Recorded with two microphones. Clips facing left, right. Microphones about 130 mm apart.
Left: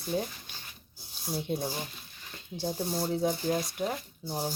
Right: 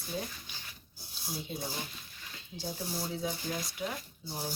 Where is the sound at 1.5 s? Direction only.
60° left (ahead or behind).